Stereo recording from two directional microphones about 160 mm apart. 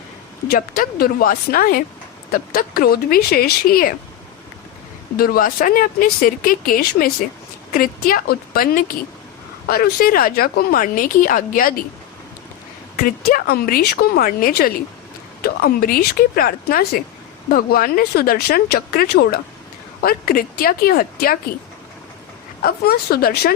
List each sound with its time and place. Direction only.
0.4 s speech: 70° left (ahead or behind)
5.1 s a woman's voice: 65° left (ahead or behind)
13.0 s a woman's voice: 65° left (ahead or behind); by 19.4 s 85° left
20.0 s speech: 65° left (ahead or behind)
22.6 s speech: 70° left (ahead or behind)